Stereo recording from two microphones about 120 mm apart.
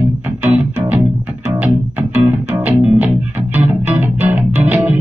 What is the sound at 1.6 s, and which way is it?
Music, 15° right (ahead or behind).